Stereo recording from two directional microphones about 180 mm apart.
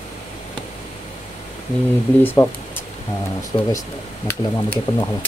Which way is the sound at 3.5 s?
25° left (ahead or behind).